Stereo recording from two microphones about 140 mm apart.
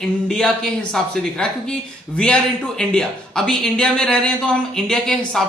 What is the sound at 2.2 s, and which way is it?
Speech, 5° left (ahead or behind).